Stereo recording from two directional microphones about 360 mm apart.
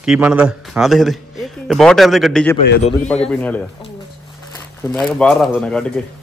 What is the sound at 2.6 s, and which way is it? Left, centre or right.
Speech, left.